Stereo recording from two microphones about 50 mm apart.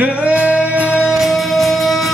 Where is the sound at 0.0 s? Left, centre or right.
Right.